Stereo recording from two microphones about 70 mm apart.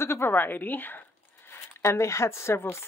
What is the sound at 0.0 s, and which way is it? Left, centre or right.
Speech, left.